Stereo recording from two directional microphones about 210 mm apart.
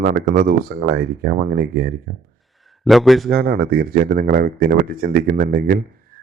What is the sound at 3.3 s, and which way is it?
Speech, 45° right (ahead or behind).